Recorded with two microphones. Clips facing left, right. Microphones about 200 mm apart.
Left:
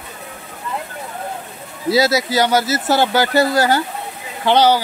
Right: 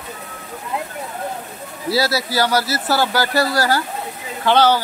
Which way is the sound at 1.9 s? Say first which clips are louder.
Left 4 dB; 20° left (ahead or behind).